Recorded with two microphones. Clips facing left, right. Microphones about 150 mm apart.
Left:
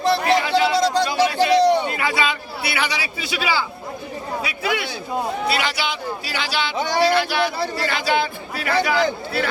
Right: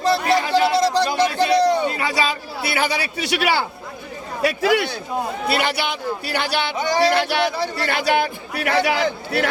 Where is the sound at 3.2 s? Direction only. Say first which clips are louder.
Right 3 dB; 65° right (ahead or behind).